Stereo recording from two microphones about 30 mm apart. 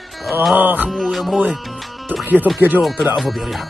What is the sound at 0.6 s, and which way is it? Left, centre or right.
Music, right.